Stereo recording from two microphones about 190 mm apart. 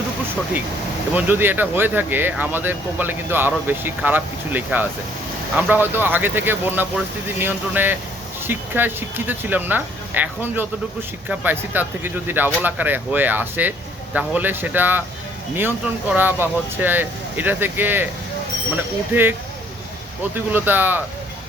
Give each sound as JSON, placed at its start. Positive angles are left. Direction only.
{"t": 1.1, "sound": "speech", "side_deg": -10}
{"t": 19.1, "sound": "speech", "side_deg": -10}
{"t": 20.3, "sound": "speech", "side_deg": -10}